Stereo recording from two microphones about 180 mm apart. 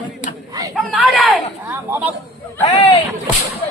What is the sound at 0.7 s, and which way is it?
Speech, centre (ahead or behind).